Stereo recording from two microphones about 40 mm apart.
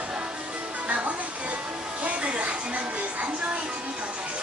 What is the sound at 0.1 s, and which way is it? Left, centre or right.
Music, right.